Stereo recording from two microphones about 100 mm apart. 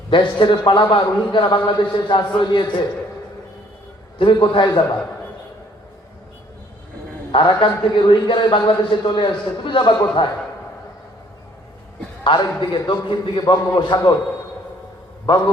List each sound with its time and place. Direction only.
0.1 s a man's voice: 55° left (ahead or behind)
4.2 s a man's voice: 55° left (ahead or behind)
7.3 s a man's voice: 55° left (ahead or behind)
12.2 s a man's voice: 55° left (ahead or behind)